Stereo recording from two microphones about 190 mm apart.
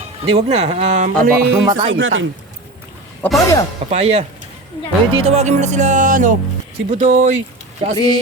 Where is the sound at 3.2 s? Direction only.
10° left (ahead or behind).